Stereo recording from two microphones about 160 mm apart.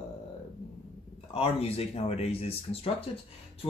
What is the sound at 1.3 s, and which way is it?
A man's voice, 40° left (ahead or behind).